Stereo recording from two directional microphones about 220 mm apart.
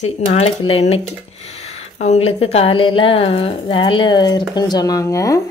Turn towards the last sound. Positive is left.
turn(degrees=15)  # may be behind; listen again after turning